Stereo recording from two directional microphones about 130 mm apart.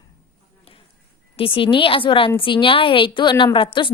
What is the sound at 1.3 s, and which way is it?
A woman's voice, 40° left (ahead or behind).